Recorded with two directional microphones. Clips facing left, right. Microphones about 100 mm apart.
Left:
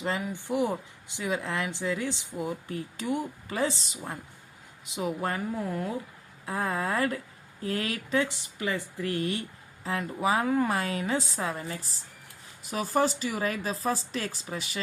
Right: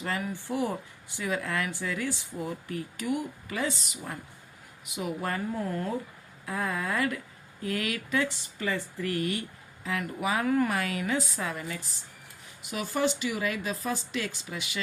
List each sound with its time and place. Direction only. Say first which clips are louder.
0.0 s speech: left 1 dB; 20° left (ahead or behind)
6.4 s speech: left 2 dB; 30° left (ahead or behind)
8.3 s speech: even; 15° left (ahead or behind)
9.1 s speech: even; 30° left (ahead or behind)